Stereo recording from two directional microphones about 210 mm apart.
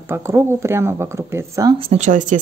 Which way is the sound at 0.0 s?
10° right (ahead or behind).